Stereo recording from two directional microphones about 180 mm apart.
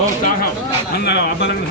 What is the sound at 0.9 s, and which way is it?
Speech, 70° left (ahead or behind).